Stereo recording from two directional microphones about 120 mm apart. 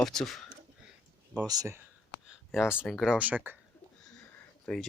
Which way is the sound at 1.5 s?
30° right (ahead or behind).